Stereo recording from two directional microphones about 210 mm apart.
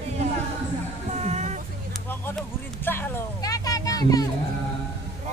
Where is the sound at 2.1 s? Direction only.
10° left (ahead or behind).